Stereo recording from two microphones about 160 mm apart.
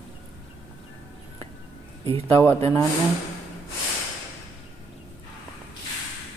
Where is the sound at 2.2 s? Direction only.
15° left (ahead or behind).